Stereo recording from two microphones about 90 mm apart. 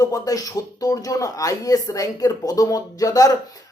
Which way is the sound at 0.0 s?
40° left (ahead or behind).